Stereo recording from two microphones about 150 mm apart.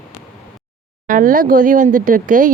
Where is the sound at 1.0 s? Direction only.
65° right (ahead or behind).